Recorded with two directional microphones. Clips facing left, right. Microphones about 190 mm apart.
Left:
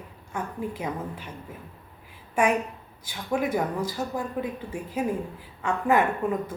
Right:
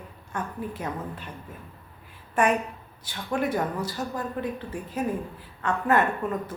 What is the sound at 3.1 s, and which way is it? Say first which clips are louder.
A woman's voice: left 1 dB; 10° left (ahead or behind).